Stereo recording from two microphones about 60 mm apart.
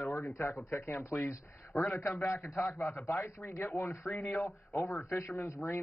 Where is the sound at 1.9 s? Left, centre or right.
Left.